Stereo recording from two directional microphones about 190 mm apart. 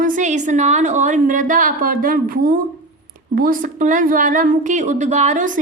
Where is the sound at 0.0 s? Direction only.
40° right (ahead or behind).